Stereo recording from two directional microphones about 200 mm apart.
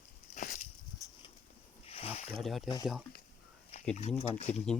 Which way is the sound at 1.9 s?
30° left (ahead or behind).